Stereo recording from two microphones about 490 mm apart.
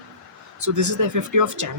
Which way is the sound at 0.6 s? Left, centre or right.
Right.